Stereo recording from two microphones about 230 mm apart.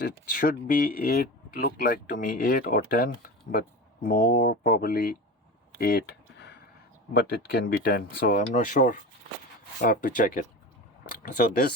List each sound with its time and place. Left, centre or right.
0.0 s speech: left
5.8 s a sound: left
7.1 s speech: left